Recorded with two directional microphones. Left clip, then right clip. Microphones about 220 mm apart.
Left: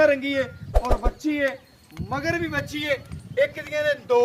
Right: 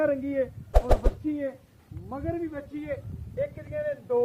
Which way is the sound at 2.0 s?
60° left (ahead or behind).